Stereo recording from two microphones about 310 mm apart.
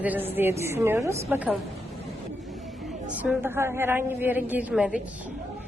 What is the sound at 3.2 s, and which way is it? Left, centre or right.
A woman's voice, centre.